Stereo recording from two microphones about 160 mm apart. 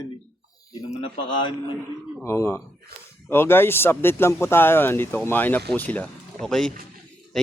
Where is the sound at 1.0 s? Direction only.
35° left (ahead or behind).